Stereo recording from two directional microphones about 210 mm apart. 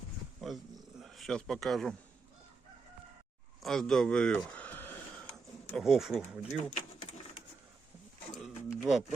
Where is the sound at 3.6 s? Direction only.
Centre (ahead or behind).